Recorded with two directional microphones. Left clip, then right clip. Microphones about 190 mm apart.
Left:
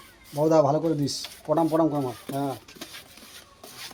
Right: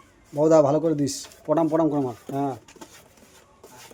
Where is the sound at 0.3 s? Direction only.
40° right (ahead or behind).